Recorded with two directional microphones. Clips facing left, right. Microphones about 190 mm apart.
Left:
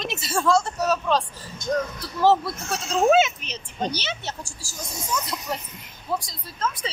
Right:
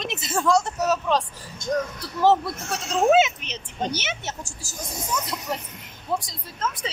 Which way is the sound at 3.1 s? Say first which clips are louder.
Even; 20° right (ahead or behind).